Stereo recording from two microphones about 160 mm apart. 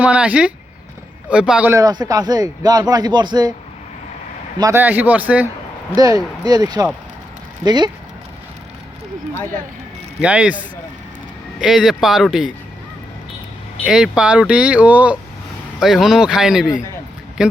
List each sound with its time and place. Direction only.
0.0 s speech: 10° right (ahead or behind)
1.7 s a man's voice: 25° right (ahead or behind)
4.5 s a man's voice: 20° right (ahead or behind)
4.8 s speech: 10° right (ahead or behind)
6.0 s a man's voice: 20° right (ahead or behind)
10.2 s speech: 5° right (ahead or behind)
13.8 s speech: 5° right (ahead or behind)